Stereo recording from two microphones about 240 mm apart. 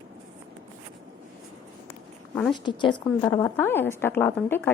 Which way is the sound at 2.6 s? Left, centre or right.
Centre.